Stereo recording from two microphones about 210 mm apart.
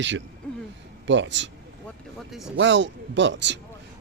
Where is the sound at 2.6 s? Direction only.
60° right (ahead or behind).